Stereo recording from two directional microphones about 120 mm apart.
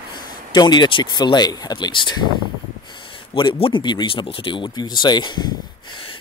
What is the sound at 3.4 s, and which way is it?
Speech, 45° left (ahead or behind).